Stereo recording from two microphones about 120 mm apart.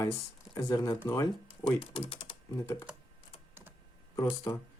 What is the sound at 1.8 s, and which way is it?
Speech, 50° left (ahead or behind).